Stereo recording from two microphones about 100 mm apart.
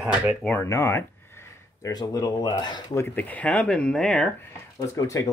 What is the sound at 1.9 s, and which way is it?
Speech, 40° left (ahead or behind).